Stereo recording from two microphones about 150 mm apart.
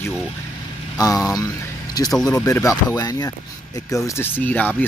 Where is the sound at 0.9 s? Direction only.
20° left (ahead or behind).